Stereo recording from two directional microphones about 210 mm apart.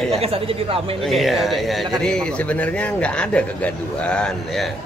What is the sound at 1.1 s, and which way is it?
A man's voice, centre (ahead or behind).